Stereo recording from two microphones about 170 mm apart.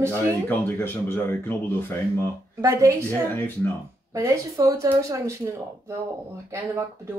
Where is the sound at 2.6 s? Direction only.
15° right (ahead or behind).